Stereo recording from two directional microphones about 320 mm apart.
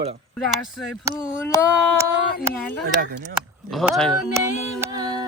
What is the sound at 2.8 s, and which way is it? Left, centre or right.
Speech, right.